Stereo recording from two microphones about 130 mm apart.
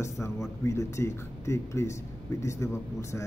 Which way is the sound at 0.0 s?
20° left (ahead or behind).